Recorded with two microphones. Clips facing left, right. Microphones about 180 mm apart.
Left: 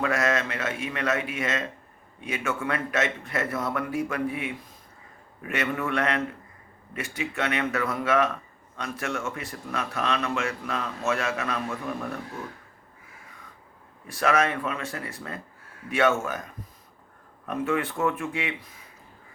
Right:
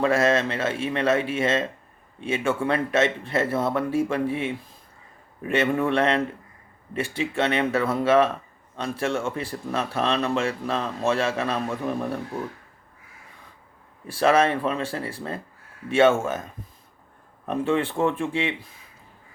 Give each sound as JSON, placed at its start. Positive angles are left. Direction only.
{"t": 0.0, "sound": "speech", "side_deg": -30}
{"t": 14.1, "sound": "speech", "side_deg": -30}